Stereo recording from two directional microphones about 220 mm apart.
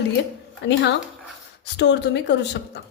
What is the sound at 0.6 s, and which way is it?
A woman's voice, 55° left (ahead or behind).